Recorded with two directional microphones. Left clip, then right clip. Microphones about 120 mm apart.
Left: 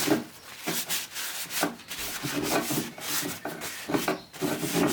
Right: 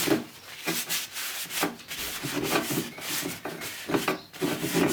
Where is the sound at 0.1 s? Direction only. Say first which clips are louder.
Even; 10° left (ahead or behind).